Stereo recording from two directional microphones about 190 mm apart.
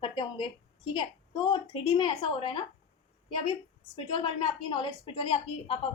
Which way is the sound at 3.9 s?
25° left (ahead or behind).